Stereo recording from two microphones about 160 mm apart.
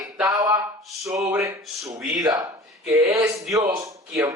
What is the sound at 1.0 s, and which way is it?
Speech, 20° right (ahead or behind).